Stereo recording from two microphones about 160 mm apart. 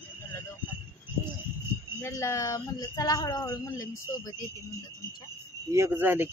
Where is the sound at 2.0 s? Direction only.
20° left (ahead or behind).